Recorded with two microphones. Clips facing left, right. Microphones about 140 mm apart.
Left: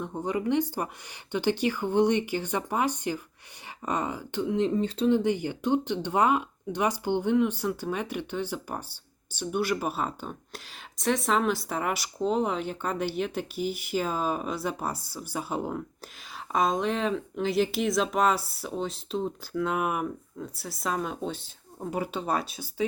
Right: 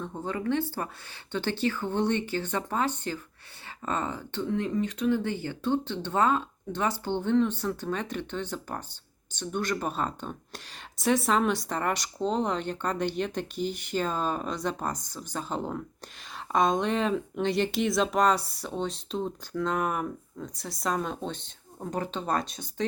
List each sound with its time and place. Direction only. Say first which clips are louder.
0.0 s speech: left 3 dB; 15° left (ahead or behind)